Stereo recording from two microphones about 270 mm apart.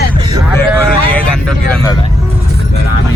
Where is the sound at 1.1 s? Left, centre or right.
Centre.